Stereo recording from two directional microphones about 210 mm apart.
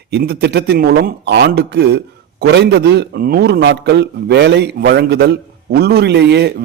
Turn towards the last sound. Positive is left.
turn(degrees=-55)  # may be behind; listen again after turning